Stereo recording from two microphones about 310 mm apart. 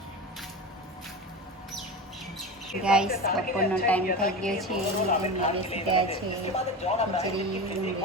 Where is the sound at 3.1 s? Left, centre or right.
Left.